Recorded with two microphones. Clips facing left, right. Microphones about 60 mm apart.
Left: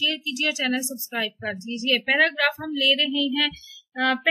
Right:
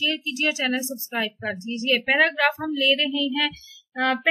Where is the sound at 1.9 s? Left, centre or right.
Centre.